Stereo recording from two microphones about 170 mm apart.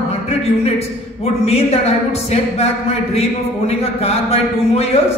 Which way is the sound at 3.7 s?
40° left (ahead or behind).